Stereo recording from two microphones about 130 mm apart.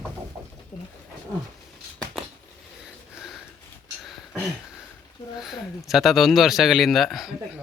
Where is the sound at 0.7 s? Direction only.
55° left (ahead or behind).